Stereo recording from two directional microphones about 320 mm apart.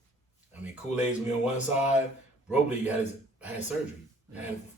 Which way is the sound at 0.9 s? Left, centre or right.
Left.